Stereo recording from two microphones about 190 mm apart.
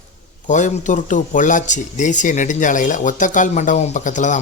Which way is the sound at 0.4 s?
40° left (ahead or behind).